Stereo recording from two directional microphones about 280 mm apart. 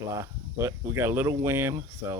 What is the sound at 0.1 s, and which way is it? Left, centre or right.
Speech, centre.